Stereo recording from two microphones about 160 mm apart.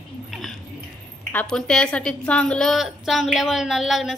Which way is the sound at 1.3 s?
5° left (ahead or behind).